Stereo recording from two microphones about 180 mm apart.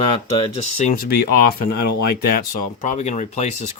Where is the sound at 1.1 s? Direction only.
55° left (ahead or behind).